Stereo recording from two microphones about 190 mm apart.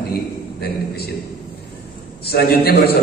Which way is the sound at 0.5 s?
55° left (ahead or behind).